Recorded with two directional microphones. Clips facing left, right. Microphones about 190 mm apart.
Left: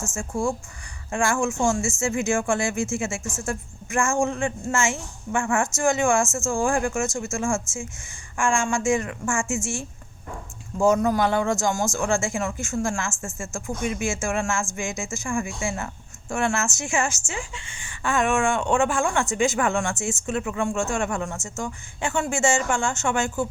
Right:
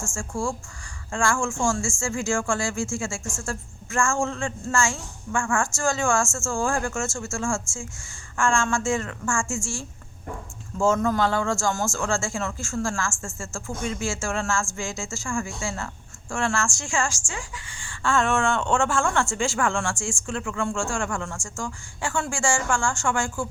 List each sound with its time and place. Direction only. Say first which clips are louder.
0.0 s a woman's voice: left 3 dB; 20° left (ahead or behind)